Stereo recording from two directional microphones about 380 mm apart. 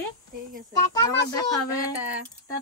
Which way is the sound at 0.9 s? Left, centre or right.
Centre.